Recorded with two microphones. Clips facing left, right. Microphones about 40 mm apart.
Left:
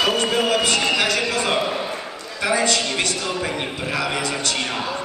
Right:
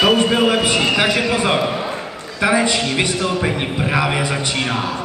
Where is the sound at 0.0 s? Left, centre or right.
Centre.